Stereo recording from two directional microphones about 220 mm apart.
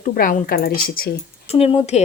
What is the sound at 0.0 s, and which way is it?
Speech, 35° left (ahead or behind).